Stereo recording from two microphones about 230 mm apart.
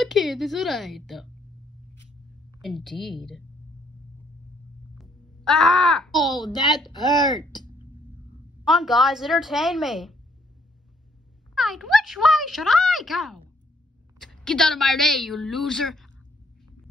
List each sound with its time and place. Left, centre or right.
0.0 s a woman's voice: centre
2.6 s a woman's voice: centre
5.4 s speech: centre
6.2 s a woman's voice: centre
8.6 s a woman's voice: centre
11.5 s a woman's voice: centre